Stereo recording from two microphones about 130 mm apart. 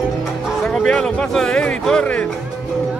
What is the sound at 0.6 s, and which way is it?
Speech, 5° left (ahead or behind).